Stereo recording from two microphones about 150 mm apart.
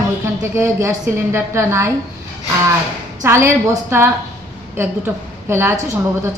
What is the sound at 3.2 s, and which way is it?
A woman's voice, 20° right (ahead or behind).